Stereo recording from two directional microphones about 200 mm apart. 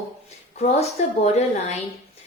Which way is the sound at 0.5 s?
35° left (ahead or behind).